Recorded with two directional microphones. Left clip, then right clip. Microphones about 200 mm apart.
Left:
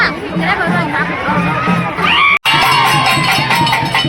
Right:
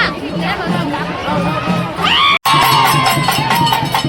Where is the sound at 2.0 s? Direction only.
45° right (ahead or behind).